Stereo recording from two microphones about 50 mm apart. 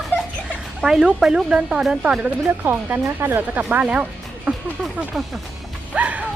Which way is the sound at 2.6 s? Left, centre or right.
Right.